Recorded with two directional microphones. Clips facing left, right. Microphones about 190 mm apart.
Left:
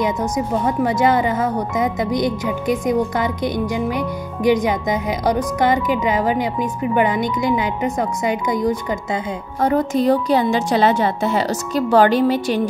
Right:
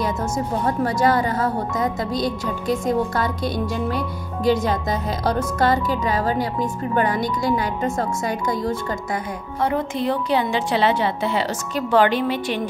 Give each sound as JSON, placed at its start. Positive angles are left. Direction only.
{"t": 0.0, "sound": "speech", "side_deg": 20}
{"t": 9.6, "sound": "a woman's voice", "side_deg": 40}